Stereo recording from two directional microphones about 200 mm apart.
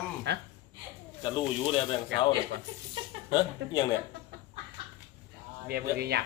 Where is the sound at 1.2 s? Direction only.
25° left (ahead or behind).